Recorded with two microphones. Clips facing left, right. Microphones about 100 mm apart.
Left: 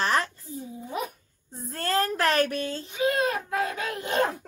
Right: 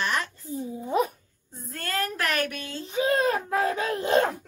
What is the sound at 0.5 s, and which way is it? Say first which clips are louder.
Speech: right 8 dB; 35° right (ahead or behind).